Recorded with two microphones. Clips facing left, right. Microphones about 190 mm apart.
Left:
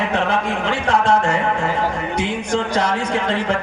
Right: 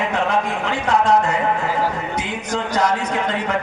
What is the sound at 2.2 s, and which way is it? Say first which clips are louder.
Speech: left 4 dB; 30° left (ahead or behind).